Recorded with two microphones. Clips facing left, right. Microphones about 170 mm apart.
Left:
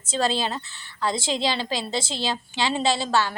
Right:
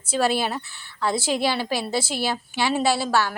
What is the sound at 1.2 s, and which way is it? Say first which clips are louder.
Speech: right 3 dB; 20° left (ahead or behind).